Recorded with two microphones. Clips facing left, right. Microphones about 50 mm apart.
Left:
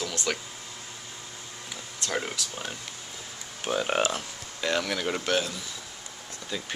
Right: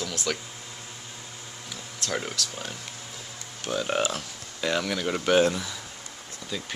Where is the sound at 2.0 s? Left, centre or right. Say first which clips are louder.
Even; centre.